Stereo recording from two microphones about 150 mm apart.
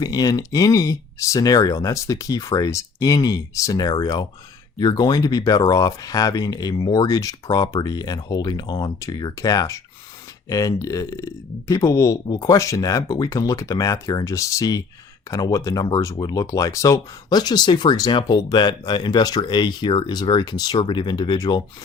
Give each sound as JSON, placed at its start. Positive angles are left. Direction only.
{"t": 0.0, "sound": "speech", "side_deg": 25}